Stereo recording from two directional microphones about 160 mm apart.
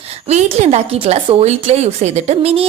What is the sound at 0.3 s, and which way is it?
A woman's voice, 45° right (ahead or behind).